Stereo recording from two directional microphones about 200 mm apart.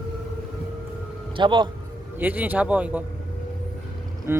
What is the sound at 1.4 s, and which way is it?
Speech, 25° right (ahead or behind).